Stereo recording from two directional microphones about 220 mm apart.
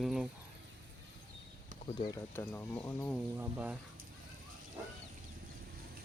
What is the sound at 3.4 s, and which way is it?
Speech, 5° right (ahead or behind).